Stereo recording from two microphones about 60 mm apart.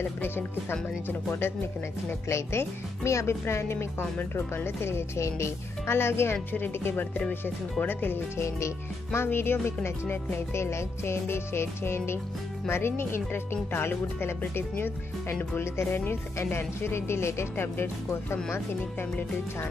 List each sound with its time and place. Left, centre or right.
0.2 s speech: left
2.2 s speech: left
4.0 s speech: left
6.3 s speech: left
8.4 s speech: left